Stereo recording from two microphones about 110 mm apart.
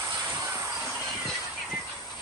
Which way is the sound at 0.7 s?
5° right (ahead or behind).